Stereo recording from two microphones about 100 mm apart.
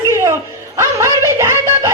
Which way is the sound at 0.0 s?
30° right (ahead or behind).